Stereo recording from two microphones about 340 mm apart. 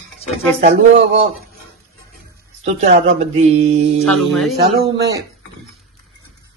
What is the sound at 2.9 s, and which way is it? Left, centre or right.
Speech, centre.